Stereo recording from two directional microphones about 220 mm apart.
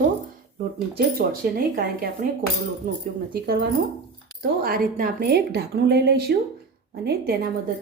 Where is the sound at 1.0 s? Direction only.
45° right (ahead or behind).